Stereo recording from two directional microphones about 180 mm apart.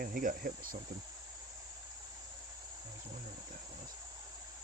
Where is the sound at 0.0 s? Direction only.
50° right (ahead or behind).